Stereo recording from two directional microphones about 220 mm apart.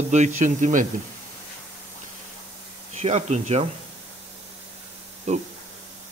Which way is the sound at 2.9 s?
30° right (ahead or behind).